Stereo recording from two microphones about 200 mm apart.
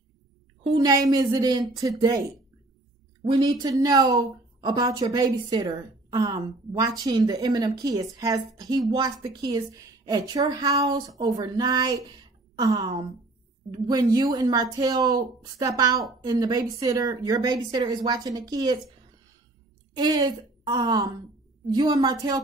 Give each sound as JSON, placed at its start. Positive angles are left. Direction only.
{"t": 0.7, "sound": "a woman's voice", "side_deg": -20}
{"t": 3.3, "sound": "a woman's voice", "side_deg": -20}
{"t": 20.0, "sound": "a woman's voice", "side_deg": -20}